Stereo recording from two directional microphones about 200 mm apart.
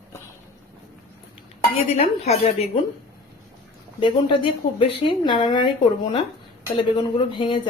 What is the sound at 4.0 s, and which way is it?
A woman's voice, 25° left (ahead or behind).